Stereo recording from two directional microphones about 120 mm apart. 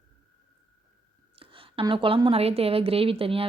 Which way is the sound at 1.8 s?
45° right (ahead or behind).